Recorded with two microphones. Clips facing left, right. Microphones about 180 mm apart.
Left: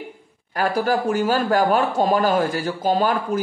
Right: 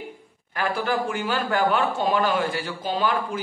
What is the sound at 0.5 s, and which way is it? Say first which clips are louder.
A man's voice: left 5 dB; 40° left (ahead or behind).